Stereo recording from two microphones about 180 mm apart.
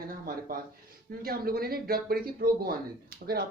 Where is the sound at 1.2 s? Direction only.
55° right (ahead or behind).